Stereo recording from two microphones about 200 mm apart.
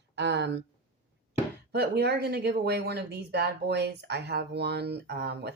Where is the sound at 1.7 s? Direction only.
55° right (ahead or behind).